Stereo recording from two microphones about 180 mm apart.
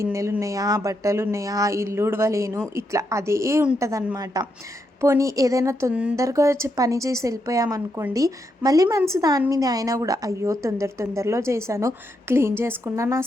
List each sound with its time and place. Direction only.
0.0 s a woman's voice: 15° right (ahead or behind)
5.9 s a woman's voice: 5° right (ahead or behind)
6.1 s a woman's voice: 15° right (ahead or behind)